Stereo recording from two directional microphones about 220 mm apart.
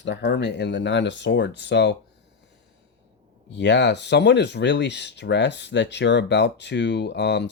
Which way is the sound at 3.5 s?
55° left (ahead or behind).